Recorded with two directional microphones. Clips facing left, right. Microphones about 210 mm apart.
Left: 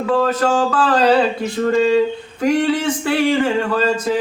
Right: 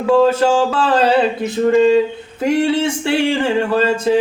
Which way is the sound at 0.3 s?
25° right (ahead or behind).